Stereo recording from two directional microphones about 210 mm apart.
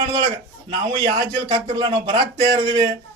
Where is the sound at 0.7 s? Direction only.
20° right (ahead or behind).